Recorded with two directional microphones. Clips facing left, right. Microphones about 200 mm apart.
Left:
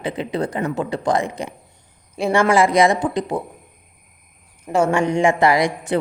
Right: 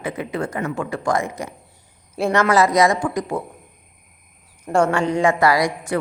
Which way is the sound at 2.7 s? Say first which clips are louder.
Left 1 dB; 30° left (ahead or behind).